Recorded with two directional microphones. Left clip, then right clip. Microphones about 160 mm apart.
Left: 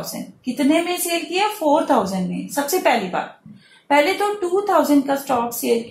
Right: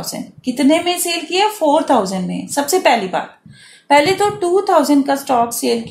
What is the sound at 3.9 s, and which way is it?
A woman's voice, 75° right (ahead or behind).